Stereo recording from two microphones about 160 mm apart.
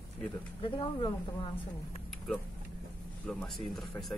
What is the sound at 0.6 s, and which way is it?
Speech, 30° left (ahead or behind).